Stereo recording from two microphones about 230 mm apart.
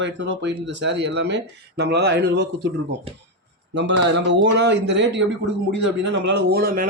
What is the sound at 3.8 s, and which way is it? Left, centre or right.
Speech, right.